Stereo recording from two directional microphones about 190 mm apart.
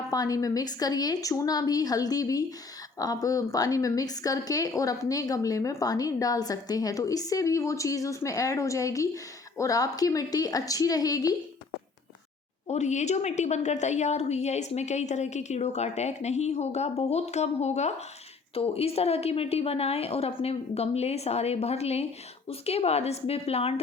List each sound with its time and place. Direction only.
0.1 s a woman's voice: 20° left (ahead or behind)
12.6 s a woman's voice: 35° left (ahead or behind)